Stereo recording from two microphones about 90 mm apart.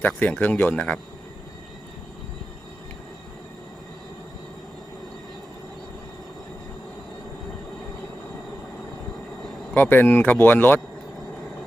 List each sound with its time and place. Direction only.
0.2 s speech: 20° left (ahead or behind)
9.7 s speech: 20° left (ahead or behind)